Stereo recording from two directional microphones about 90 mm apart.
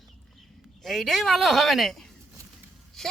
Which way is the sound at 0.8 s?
Centre (ahead or behind).